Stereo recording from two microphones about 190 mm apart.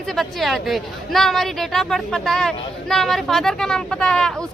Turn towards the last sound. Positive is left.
turn(degrees=5)  # may be behind; listen again after turning